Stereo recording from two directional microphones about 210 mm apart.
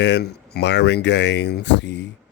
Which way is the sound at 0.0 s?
55° left (ahead or behind).